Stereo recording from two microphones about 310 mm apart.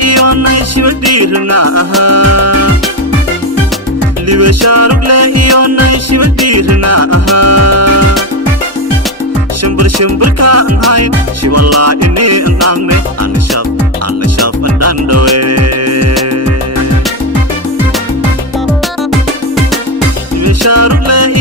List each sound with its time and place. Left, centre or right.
0.0 s music: right
4.3 s music: right
9.6 s music: right
14.3 s music: right
20.4 s music: right